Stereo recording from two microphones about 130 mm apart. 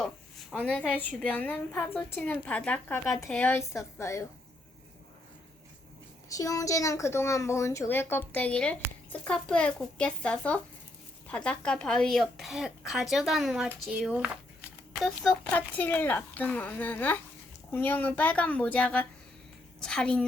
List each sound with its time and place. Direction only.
0.0 s a sound: 5° left (ahead or behind)
0.9 s a woman's voice: 10° left (ahead or behind)
6.2 s a woman's voice: 25° left (ahead or behind); by 13.7 s centre (ahead or behind)
14.9 s speech: centre (ahead or behind)
15.5 s a woman's voice: 15° left (ahead or behind)